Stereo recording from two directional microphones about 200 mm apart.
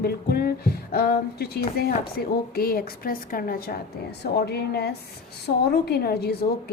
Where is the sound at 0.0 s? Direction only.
50° left (ahead or behind).